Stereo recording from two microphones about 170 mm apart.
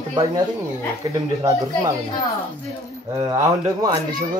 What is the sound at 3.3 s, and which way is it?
Speech, 25° right (ahead or behind).